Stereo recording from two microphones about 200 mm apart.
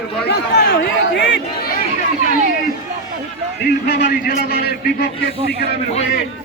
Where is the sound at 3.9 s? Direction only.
55° left (ahead or behind).